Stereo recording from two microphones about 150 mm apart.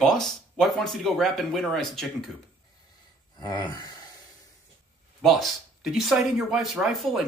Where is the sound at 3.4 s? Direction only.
30° left (ahead or behind).